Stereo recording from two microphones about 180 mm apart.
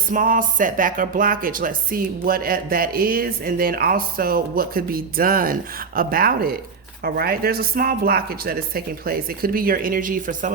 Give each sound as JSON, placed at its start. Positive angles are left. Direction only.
{"t": 0.1, "sound": "speech", "side_deg": -50}